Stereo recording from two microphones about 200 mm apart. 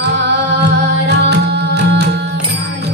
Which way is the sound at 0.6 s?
55° right (ahead or behind).